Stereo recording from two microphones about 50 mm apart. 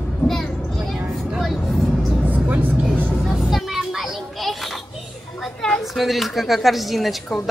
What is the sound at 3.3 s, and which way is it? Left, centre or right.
Vehicle, centre.